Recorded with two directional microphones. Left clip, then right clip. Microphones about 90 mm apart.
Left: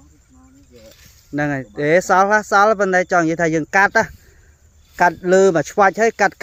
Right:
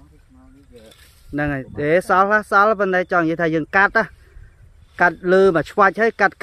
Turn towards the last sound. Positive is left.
turn(degrees=20)  # may be behind; listen again after turning